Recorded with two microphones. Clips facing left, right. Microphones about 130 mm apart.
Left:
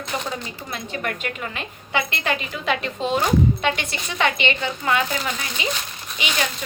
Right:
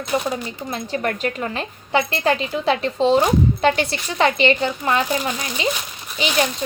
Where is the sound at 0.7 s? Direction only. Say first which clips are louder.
Right 5 dB; 35° right (ahead or behind).